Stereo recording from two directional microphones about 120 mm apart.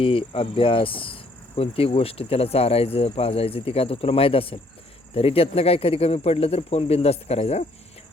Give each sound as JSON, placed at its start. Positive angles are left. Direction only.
{"t": 0.0, "sound": "cricket", "side_deg": 50}
{"t": 5.1, "sound": "speech", "side_deg": 55}